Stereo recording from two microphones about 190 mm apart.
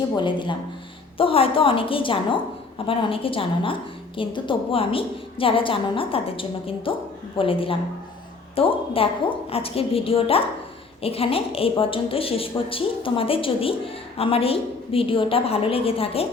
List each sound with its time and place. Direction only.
0.2 s a woman's voice: 25° left (ahead or behind)